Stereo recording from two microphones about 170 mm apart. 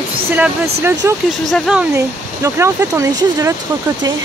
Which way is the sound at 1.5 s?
5° right (ahead or behind).